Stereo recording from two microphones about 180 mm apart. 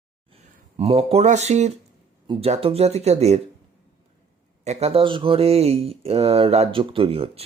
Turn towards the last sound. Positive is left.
turn(degrees=-30)  # may be behind; listen again after turning